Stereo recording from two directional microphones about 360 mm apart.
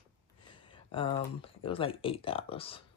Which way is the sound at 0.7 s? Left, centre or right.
Centre.